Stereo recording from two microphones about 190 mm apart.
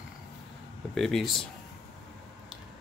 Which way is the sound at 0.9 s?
Centre (ahead or behind).